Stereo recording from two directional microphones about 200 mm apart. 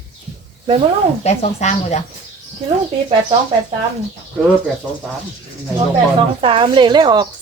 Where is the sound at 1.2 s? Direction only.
35° left (ahead or behind).